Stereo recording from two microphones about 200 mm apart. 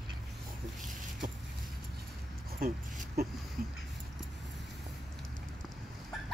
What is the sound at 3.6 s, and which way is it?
Dog, 45° right (ahead or behind).